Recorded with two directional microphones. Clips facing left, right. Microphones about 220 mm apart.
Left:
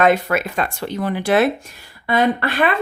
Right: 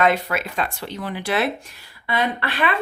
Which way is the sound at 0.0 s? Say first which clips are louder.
Left 4 dB; 50° left (ahead or behind).